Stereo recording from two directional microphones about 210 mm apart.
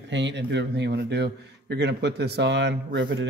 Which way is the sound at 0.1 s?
60° right (ahead or behind).